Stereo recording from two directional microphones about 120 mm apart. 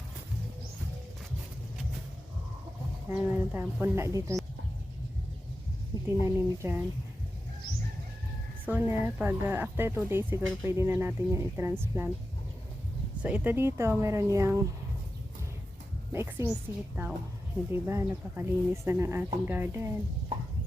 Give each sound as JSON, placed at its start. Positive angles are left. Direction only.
{"t": 3.1, "sound": "speech", "side_deg": -15}
{"t": 6.1, "sound": "speech", "side_deg": -25}
{"t": 8.6, "sound": "speech", "side_deg": -15}
{"t": 13.2, "sound": "speech", "side_deg": -10}
{"t": 16.1, "sound": "a woman's voice", "side_deg": -15}